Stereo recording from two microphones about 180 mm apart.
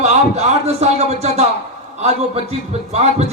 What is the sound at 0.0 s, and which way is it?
A man's voice, 35° right (ahead or behind).